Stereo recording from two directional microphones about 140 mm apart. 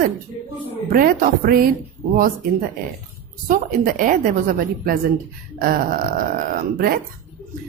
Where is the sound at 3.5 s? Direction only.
65° right (ahead or behind); by 6.2 s 85° right.